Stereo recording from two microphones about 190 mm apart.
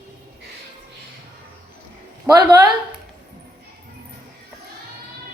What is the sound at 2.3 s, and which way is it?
Speech, 5° right (ahead or behind).